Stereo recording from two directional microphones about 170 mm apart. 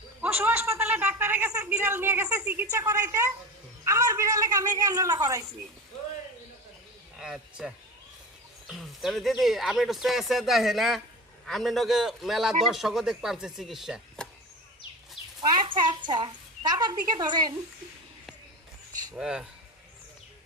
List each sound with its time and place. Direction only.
0.2 s a sound: 10° right (ahead or behind)
7.2 s speech: 5° right (ahead or behind)
15.4 s a woman's voice: 25° right (ahead or behind)
19.1 s speech: 5° right (ahead or behind)